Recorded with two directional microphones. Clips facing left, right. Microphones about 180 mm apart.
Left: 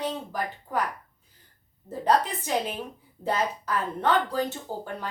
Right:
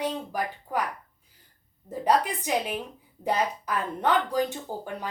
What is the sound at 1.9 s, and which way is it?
Speech, 15° right (ahead or behind).